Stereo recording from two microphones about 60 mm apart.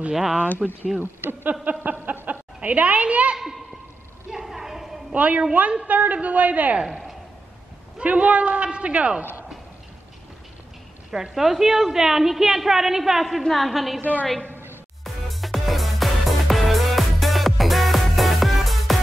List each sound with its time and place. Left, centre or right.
0.1 s a woman's voice: centre
1.0 s speech: right
1.5 s a sound: right
2.2 s a woman's voice: right
4.3 s a sound: centre
5.1 s a man's voice: right
8.0 s a man's voice: right
11.3 s a woman's voice: centre
14.4 s a sound: right
15.4 s music: centre